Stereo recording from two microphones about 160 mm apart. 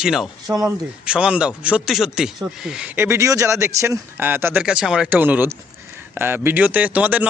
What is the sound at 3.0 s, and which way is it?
A man's voice, 15° right (ahead or behind).